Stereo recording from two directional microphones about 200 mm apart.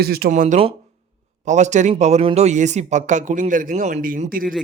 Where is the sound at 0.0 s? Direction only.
50° right (ahead or behind).